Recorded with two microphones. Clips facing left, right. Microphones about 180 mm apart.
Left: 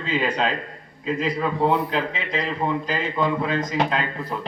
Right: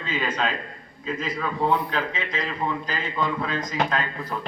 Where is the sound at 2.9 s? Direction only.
10° left (ahead or behind).